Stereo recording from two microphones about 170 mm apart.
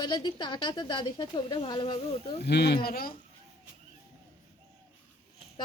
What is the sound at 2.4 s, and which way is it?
Speech, 75° left (ahead or behind).